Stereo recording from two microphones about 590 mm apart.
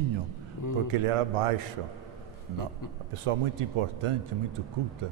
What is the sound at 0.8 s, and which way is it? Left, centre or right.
Speech, right.